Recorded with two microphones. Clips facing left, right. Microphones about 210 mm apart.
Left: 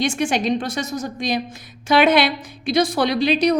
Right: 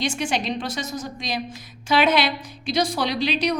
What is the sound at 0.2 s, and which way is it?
A woman's voice, 50° left (ahead or behind).